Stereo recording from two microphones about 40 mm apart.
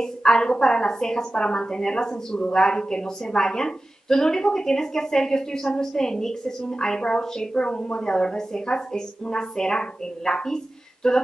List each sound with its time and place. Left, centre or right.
0.0 s a woman's voice: centre